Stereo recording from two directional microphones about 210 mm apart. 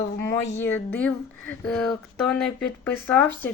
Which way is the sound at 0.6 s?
5° left (ahead or behind).